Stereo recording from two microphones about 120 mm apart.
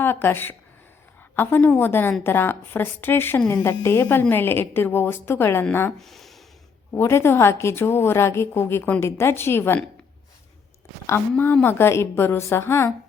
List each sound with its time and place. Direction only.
0.0 s a woman's voice: 20° left (ahead or behind)
6.0 s speech: centre (ahead or behind)
6.9 s a woman's voice: 20° left (ahead or behind)
11.0 s a woman's voice: 20° left (ahead or behind)